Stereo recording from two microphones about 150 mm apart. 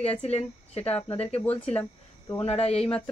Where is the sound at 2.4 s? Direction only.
40° left (ahead or behind).